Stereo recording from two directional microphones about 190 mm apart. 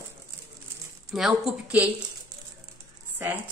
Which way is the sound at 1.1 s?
Centre (ahead or behind).